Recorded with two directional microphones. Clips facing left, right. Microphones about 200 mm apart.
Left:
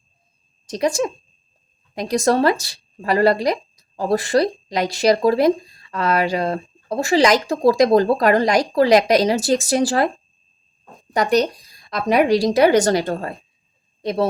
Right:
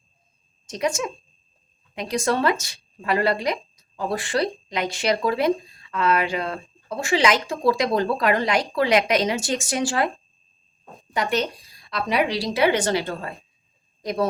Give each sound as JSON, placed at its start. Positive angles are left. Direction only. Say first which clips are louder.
{"t": 0.7, "sound": "speech", "louder": "left 5 dB", "side_deg": 35}
{"t": 11.1, "sound": "a woman's voice", "louder": "left 7 dB", "side_deg": 40}
{"t": 14.0, "sound": "speech", "louder": "left 4 dB", "side_deg": 30}